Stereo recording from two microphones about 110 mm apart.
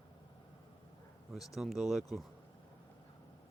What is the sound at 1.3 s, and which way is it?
Speech, centre (ahead or behind).